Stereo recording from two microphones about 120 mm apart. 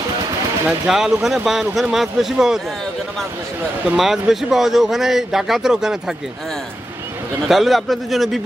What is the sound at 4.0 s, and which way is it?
Speech, centre (ahead or behind).